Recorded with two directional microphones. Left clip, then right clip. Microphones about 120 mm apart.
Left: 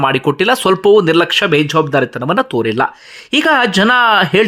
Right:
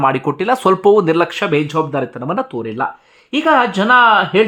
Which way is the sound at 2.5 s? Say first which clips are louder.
Left 6 dB; 40° left (ahead or behind).